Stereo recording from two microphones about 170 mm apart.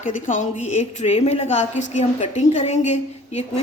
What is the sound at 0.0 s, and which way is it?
A woman's voice, 50° left (ahead or behind).